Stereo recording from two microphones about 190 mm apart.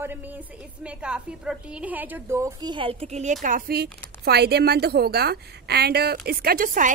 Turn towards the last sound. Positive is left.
turn(degrees=-45)  # may be behind; listen again after turning